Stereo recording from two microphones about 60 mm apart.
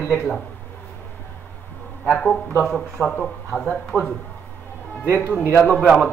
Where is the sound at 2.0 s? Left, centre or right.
Centre.